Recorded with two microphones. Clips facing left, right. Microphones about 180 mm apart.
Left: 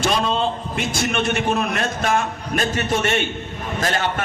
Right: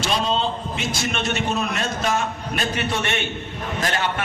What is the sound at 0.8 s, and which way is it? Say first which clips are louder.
A man's voice: left 5 dB; 55° left (ahead or behind).